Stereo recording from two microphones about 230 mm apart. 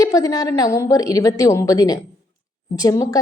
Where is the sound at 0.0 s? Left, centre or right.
Centre.